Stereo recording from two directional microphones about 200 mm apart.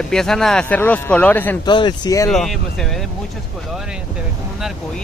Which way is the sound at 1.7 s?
20° left (ahead or behind).